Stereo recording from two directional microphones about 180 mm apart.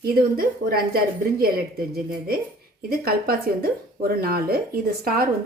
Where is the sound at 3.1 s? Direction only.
55° right (ahead or behind).